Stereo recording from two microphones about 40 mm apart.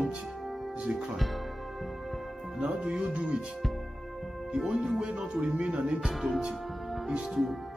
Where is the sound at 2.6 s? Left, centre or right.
Right.